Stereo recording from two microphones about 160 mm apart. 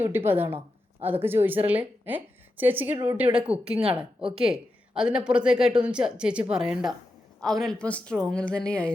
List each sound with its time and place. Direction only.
0.3 s a woman's voice: 15° right (ahead or behind)
4.2 s speech: 35° right (ahead or behind)
4.4 s speech: 5° right (ahead or behind)